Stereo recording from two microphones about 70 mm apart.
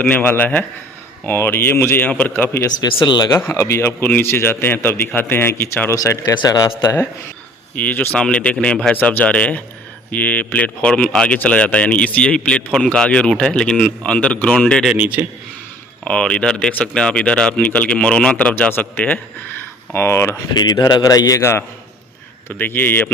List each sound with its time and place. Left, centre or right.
0.0 s speech: left
2.0 s speech: left
3.5 s speech: left
6.2 s speech: left
7.8 s speech: left
14.9 s a man's voice: right
16.0 s speech: centre
19.9 s speech: left
20.6 s a man's voice: left
22.4 s speech: left